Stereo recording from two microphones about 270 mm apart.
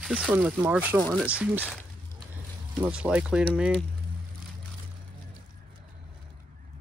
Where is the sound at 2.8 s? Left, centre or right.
Centre.